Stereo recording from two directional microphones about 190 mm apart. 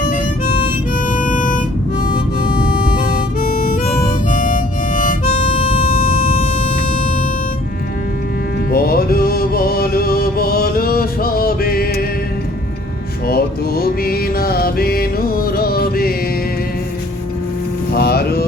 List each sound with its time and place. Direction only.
0.0 s harmonica: 45° left (ahead or behind)
4.3 s harmonica: 45° left (ahead or behind)
5.8 s vehicle: 45° left (ahead or behind)
8.7 s music: 50° left (ahead or behind)
13.2 s mantra: 55° left (ahead or behind)
17.9 s music: 55° left (ahead or behind)